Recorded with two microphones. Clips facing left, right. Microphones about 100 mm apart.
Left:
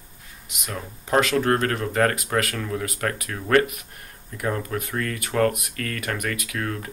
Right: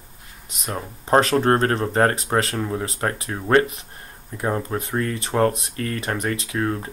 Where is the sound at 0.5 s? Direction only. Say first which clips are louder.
Right 4 dB; 35° right (ahead or behind).